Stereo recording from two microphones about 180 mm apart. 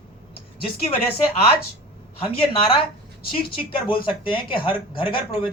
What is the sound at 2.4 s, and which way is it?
Speech, 30° left (ahead or behind).